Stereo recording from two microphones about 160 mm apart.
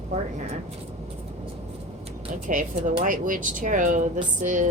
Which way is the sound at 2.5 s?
60° right (ahead or behind).